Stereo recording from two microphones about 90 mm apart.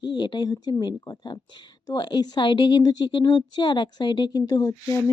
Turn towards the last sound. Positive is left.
turn(degrees=40)  # may be behind; listen again after turning